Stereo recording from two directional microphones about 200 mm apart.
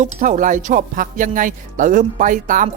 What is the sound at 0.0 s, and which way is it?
Speech, 40° right (ahead or behind).